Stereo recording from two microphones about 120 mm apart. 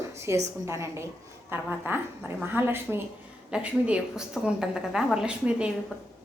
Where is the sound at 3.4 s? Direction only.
10° right (ahead or behind).